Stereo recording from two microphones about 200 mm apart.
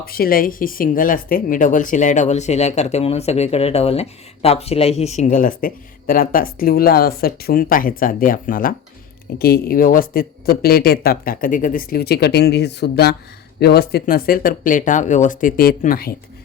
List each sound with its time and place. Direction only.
0.0 s speech: 50° left (ahead or behind)